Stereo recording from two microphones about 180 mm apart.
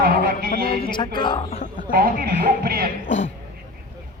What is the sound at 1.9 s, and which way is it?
Speech, 55° right (ahead or behind).